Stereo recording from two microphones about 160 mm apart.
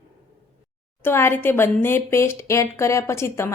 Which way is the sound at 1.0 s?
15° left (ahead or behind).